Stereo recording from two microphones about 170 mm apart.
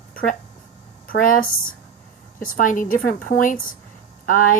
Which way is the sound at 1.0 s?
55° left (ahead or behind).